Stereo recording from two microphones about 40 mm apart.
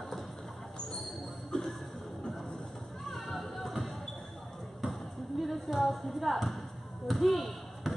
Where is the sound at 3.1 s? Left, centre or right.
Centre.